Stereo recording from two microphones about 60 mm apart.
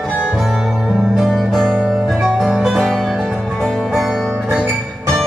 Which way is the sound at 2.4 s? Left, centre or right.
Centre.